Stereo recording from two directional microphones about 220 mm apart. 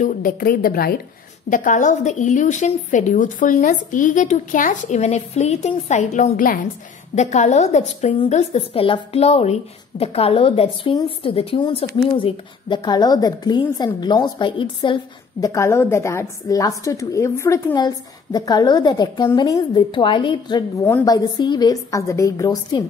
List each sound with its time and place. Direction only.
0.0 s a woman's voice: 40° left (ahead or behind); by 22.8 s 15° left (ahead or behind)